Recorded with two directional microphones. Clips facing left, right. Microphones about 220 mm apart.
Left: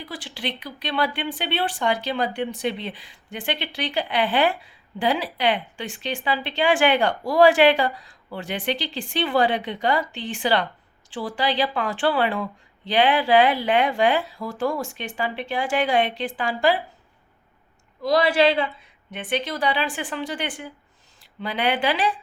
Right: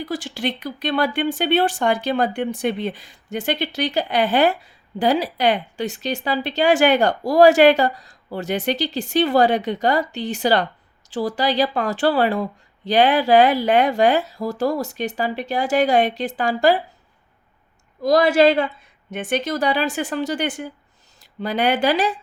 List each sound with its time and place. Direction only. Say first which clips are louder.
0.0 s speech: right 7 dB; 45° right (ahead or behind)
18.0 s speech: right 4 dB; 45° right (ahead or behind)